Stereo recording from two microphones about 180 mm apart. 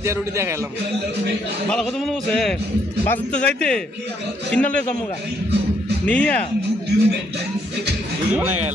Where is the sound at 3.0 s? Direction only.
10° left (ahead or behind).